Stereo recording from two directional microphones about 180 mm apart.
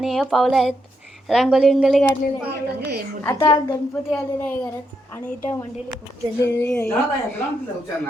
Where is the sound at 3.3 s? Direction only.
20° left (ahead or behind).